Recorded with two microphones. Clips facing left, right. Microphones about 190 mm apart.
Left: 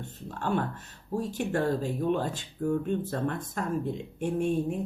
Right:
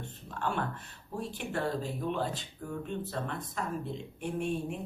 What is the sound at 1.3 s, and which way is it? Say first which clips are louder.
Speech: left 5 dB; 45° left (ahead or behind).